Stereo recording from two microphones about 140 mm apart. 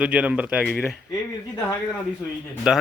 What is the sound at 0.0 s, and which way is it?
Speech, 10° right (ahead or behind).